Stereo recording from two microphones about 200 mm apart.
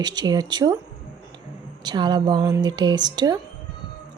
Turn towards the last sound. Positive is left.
turn(degrees=-20)  # may be behind; listen again after turning